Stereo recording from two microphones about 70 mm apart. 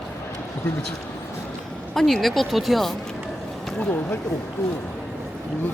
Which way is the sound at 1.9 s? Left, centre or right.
Centre.